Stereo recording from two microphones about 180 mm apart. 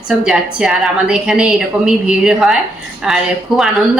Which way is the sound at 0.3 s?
5° right (ahead or behind).